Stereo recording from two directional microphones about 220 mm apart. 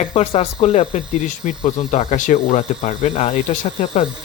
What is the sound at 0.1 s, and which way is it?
Speech, 25° left (ahead or behind).